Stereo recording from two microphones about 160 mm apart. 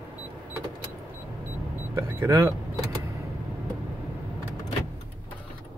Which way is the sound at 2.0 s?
15° right (ahead or behind).